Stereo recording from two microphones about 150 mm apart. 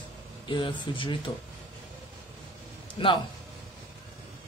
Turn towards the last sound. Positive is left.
turn(degrees=35)  # may be behind; listen again after turning